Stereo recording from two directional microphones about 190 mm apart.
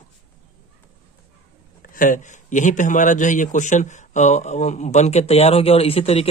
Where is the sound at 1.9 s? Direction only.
45° left (ahead or behind).